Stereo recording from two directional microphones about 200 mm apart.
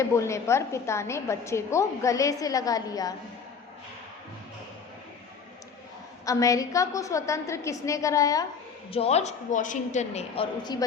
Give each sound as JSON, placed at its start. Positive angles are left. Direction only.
{"t": 0.0, "sound": "a woman's voice", "side_deg": 15}
{"t": 6.2, "sound": "a woman's voice", "side_deg": 15}
{"t": 8.9, "sound": "a woman's voice", "side_deg": 30}